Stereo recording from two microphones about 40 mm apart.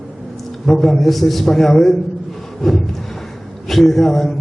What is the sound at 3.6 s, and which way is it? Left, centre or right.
Speech, centre.